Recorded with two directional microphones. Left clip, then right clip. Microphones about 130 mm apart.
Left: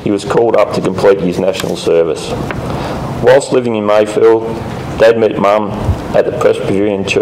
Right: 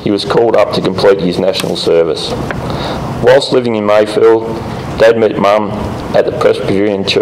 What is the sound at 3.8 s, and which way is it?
A man's voice, 20° right (ahead or behind).